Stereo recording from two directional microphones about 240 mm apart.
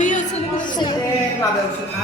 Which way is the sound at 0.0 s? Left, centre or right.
Left.